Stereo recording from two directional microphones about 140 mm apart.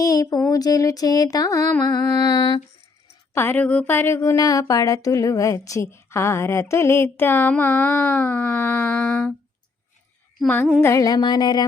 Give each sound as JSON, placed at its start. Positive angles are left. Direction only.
{"t": 0.0, "sound": "a sound", "side_deg": 25}
{"t": 3.3, "sound": "speech", "side_deg": 15}
{"t": 10.8, "sound": "music", "side_deg": 20}